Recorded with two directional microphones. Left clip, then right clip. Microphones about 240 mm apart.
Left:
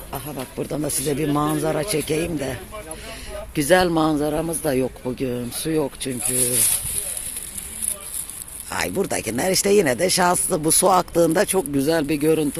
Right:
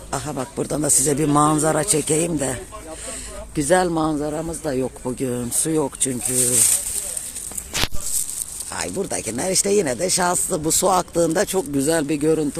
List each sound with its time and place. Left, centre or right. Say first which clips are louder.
0.1 s speech: right 5 dB; centre
3.5 s a man's voice: left 1 dB; centre
5.0 s speech: right 1 dB; centre
6.3 s speech: right 4 dB; right
8.7 s speech: left 3 dB; centre